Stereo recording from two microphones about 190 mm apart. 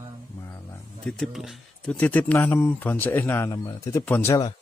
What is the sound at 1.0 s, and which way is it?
Speech, 5° left (ahead or behind).